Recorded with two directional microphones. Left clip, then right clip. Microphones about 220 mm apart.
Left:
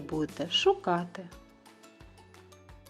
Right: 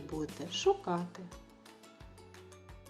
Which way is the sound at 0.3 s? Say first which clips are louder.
Left 5 dB; 40° left (ahead or behind).